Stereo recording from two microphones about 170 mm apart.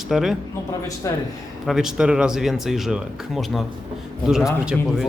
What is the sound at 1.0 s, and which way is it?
Speech, 20° left (ahead or behind).